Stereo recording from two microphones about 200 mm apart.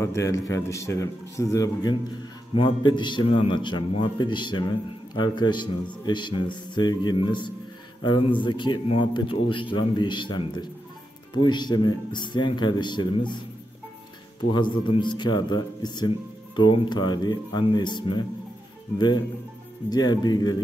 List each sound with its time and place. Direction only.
0.0 s a man's voice: 15° left (ahead or behind)
14.5 s a man's voice: 25° left (ahead or behind)
19.9 s a man's voice: 20° left (ahead or behind)